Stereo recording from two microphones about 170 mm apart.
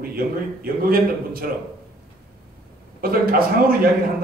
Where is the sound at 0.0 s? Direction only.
60° right (ahead or behind).